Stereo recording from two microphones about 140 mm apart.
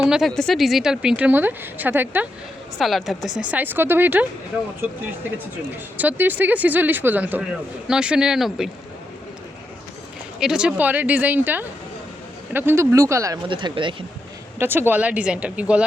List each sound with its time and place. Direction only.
0.0 s a woman's voice: 5° right (ahead or behind)
2.7 s a woman's voice: centre (ahead or behind)
3.5 s speech: 15° right (ahead or behind)
6.0 s a woman's voice: 10° right (ahead or behind)
10.4 s speech: 5° right (ahead or behind); by 13.4 s 20° right (ahead or behind)
13.5 s speech: 35° right (ahead or behind)
14.6 s speech: 15° right (ahead or behind)